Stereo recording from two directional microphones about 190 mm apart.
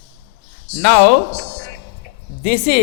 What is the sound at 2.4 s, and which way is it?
Speech, 50° left (ahead or behind).